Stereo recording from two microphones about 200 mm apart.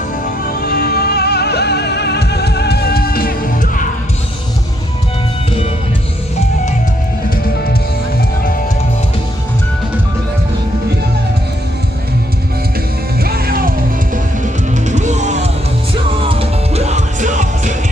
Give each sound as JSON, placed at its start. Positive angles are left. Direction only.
{"t": 0.6, "sound": "music", "side_deg": 50}
{"t": 13.2, "sound": "music", "side_deg": -50}